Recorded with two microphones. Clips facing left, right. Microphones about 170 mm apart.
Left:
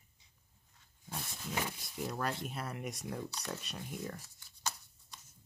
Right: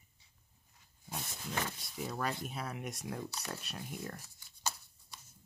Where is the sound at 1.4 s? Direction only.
10° left (ahead or behind).